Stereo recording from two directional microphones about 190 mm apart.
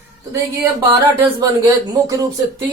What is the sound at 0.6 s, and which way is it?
Speech, 15° right (ahead or behind).